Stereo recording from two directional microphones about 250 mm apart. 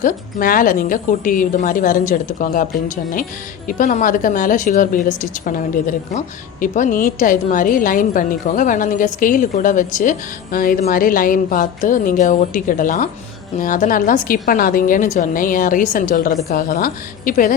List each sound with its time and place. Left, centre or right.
0.0 s a woman's voice: left